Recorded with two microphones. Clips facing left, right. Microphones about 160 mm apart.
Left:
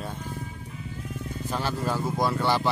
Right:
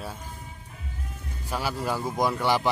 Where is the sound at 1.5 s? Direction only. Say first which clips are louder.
Even; 10° right (ahead or behind).